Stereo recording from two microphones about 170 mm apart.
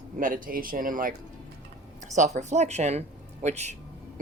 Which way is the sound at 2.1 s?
45° right (ahead or behind).